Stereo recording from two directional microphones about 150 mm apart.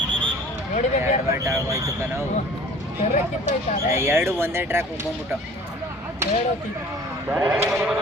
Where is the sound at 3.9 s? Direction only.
15° right (ahead or behind).